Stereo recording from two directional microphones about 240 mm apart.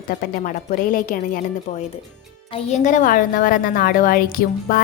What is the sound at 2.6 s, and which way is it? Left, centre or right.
A woman's voice, left.